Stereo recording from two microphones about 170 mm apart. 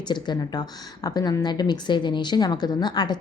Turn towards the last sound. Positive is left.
turn(degrees=25)  # may be behind; listen again after turning